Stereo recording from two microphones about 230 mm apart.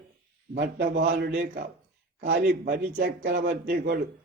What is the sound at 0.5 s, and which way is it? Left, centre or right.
A man's voice, right.